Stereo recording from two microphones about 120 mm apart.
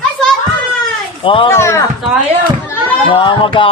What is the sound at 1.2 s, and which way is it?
Speech, 45° left (ahead or behind).